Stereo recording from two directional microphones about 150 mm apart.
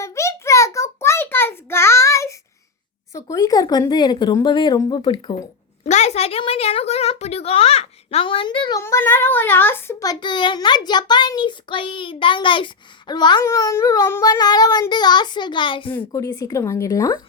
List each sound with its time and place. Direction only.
0.0 s a sound: 20° left (ahead or behind)
3.1 s speech: 20° left (ahead or behind)
5.8 s a child's voice: 50° left (ahead or behind); by 8.8 s 30° left (ahead or behind)
8.8 s speech: 15° left (ahead or behind); by 15.9 s 35° left (ahead or behind)
15.9 s speech: 15° left (ahead or behind)